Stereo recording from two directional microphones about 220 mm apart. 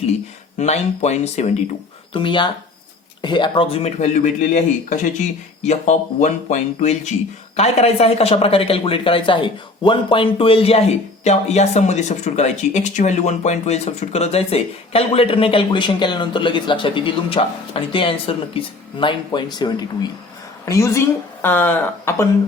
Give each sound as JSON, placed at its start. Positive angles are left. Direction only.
{"t": 0.6, "sound": "speech", "side_deg": 30}